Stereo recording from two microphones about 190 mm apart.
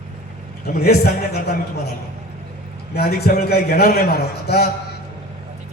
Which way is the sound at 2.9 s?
55° left (ahead or behind).